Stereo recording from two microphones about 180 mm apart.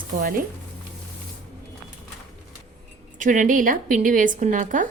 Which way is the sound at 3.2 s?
45° right (ahead or behind).